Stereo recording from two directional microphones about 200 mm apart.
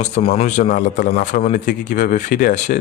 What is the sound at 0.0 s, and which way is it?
A man's voice, 30° left (ahead or behind).